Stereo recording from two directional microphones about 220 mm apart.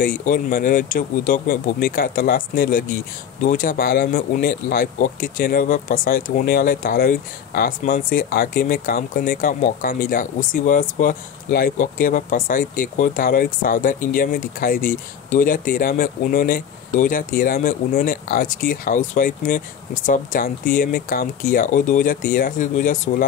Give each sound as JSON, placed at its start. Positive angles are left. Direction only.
{"t": 0.0, "sound": "speech", "side_deg": 40}